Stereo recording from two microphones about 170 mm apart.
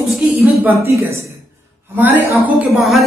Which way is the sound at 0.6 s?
15° right (ahead or behind).